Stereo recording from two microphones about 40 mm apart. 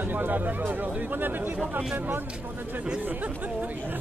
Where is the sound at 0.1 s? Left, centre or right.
Right.